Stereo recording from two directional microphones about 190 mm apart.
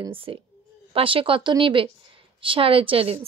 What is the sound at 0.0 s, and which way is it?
A woman's voice, 30° right (ahead or behind).